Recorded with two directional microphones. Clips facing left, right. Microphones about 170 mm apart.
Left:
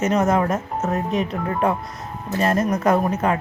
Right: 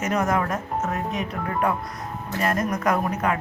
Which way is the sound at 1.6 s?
25° left (ahead or behind).